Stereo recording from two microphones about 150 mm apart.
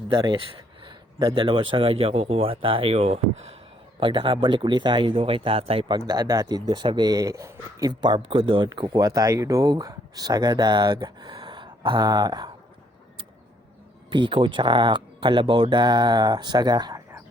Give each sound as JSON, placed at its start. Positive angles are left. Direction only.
{"t": 0.1, "sound": "speech", "side_deg": -30}
{"t": 6.1, "sound": "a man's voice", "side_deg": -25}
{"t": 14.1, "sound": "speech", "side_deg": -30}